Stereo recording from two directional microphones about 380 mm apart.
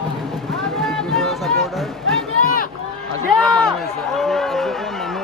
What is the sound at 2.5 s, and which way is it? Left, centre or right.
Run, left.